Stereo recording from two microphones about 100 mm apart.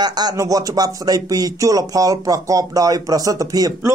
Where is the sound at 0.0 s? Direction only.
45° right (ahead or behind).